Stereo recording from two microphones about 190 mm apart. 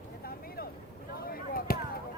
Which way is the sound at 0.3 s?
55° left (ahead or behind).